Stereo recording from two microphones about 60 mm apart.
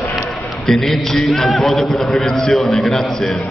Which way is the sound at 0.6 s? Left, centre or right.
Centre.